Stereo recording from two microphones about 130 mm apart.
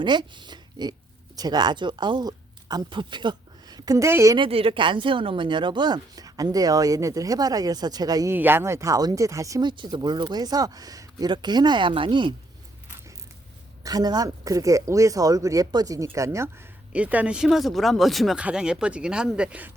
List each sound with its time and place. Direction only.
0.0 s speech: 35° right (ahead or behind)
4.4 s speech: 45° right (ahead or behind); by 8.3 s 30° right (ahead or behind)
8.3 s speech: 15° right (ahead or behind); by 12.3 s 40° right (ahead or behind)
13.8 s speech: 30° right (ahead or behind)
16.9 s speech: 10° right (ahead or behind)